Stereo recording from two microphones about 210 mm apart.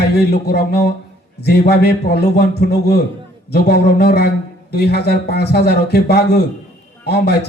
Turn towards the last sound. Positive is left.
turn(degrees=50)  # may be behind; listen again after turning